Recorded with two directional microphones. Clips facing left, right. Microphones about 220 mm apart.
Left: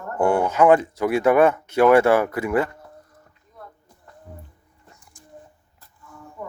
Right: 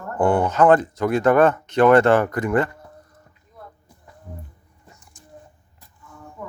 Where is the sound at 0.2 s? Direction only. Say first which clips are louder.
Right 1 dB; 10° left (ahead or behind).